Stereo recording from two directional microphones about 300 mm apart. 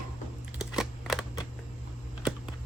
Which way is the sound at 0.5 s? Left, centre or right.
Centre.